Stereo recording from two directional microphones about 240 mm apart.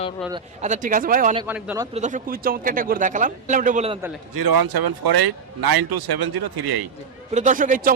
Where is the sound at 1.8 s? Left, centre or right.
Right.